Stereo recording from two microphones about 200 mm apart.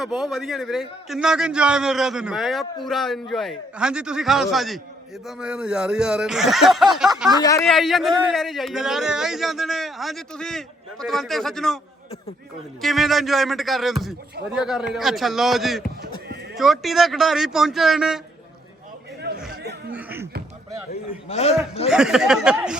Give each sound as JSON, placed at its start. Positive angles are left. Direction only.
{"t": 0.0, "sound": "speech", "side_deg": 0}
{"t": 12.8, "sound": "speech", "side_deg": 0}
{"t": 19.9, "sound": "a sound", "side_deg": -10}
{"t": 21.2, "sound": "a man's voice", "side_deg": 30}
{"t": 21.8, "sound": "speech", "side_deg": -5}